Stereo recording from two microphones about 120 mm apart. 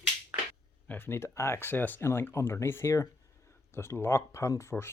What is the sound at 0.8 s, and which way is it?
Speech, 20° left (ahead or behind).